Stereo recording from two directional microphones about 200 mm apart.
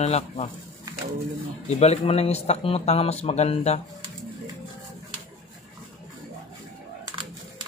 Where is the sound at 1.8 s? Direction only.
30° left (ahead or behind).